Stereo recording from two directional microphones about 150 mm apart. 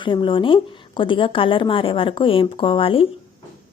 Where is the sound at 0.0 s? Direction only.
30° left (ahead or behind).